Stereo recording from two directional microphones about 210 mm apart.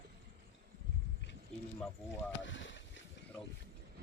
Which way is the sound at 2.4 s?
60° left (ahead or behind).